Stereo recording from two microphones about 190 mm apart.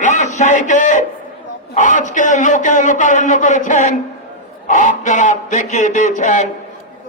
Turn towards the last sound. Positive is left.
turn(degrees=40)  # may be behind; listen again after turning